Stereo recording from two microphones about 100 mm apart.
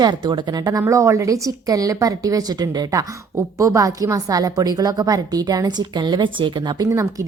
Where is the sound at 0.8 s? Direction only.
30° right (ahead or behind); by 6.8 s 50° right (ahead or behind).